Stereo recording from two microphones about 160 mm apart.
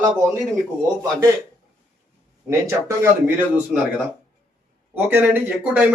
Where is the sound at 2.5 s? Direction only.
15° right (ahead or behind).